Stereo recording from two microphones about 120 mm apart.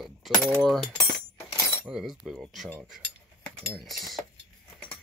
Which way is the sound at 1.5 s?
25° left (ahead or behind).